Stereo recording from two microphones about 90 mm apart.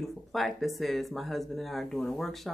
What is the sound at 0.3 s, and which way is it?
Speech, centre (ahead or behind).